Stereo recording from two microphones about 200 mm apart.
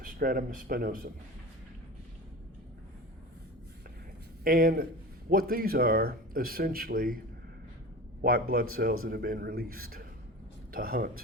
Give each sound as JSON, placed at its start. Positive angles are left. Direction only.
{"t": 0.0, "sound": "speech", "side_deg": -45}
{"t": 4.4, "sound": "speech", "side_deg": -45}
{"t": 8.2, "sound": "speech", "side_deg": -50}